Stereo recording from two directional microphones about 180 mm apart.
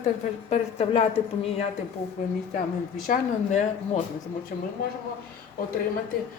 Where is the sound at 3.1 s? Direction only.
40° left (ahead or behind).